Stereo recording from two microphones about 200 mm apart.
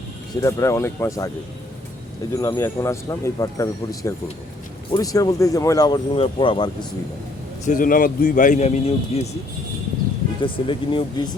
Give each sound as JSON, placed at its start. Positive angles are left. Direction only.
{"t": 0.3, "sound": "speech", "side_deg": 15}
{"t": 2.4, "sound": "speech", "side_deg": 15}
{"t": 7.6, "sound": "a man's voice", "side_deg": 40}
{"t": 10.4, "sound": "speech", "side_deg": 25}